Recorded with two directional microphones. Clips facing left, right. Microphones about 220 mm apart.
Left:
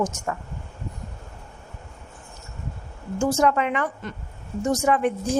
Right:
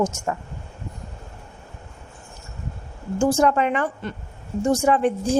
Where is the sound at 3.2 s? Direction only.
30° right (ahead or behind).